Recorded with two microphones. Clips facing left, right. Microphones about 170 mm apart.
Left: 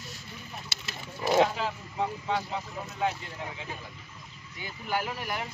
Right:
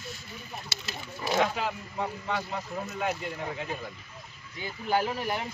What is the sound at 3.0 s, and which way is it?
Speech, 55° right (ahead or behind).